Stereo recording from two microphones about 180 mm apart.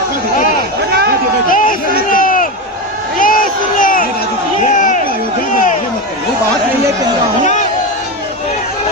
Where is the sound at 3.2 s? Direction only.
50° left (ahead or behind).